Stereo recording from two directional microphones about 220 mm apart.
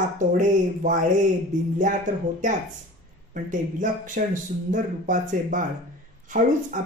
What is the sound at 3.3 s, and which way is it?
Speech, 35° right (ahead or behind).